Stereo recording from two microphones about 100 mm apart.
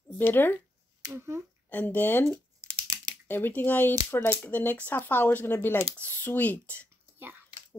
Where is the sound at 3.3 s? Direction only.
20° left (ahead or behind).